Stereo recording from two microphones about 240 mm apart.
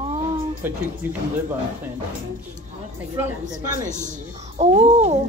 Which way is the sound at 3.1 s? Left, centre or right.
Centre.